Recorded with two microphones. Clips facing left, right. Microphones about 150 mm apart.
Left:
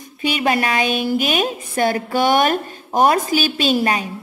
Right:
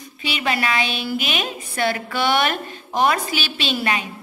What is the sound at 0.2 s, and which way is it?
A woman's voice, 45° left (ahead or behind).